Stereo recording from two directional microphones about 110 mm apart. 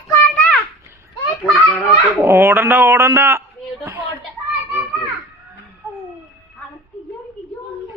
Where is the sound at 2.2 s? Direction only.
20° right (ahead or behind).